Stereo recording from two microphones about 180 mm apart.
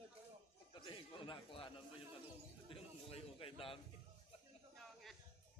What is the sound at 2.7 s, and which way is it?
Bird, 30° left (ahead or behind).